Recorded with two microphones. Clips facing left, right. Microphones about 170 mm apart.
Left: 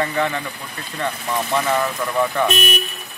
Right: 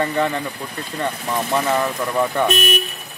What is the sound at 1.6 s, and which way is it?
Speech, 25° right (ahead or behind).